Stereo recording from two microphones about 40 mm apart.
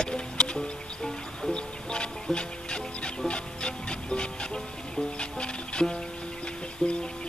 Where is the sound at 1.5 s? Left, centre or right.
Left.